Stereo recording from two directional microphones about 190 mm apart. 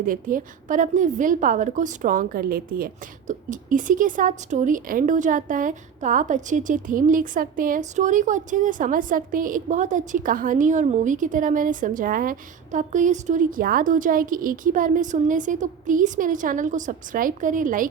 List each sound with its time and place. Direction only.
0.0 s a woman's voice: 45° right (ahead or behind)